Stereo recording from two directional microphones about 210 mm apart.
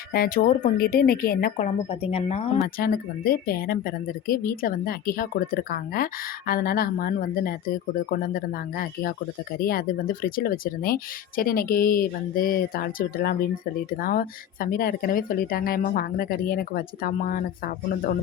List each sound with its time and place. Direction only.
0.1 s speech: 45° left (ahead or behind)
2.7 s speech: 45° left (ahead or behind)